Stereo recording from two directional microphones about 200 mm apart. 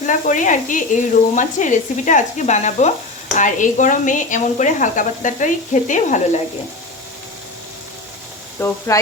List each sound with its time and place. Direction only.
0.0 s speech: 40° left (ahead or behind)
8.5 s speech: 10° left (ahead or behind)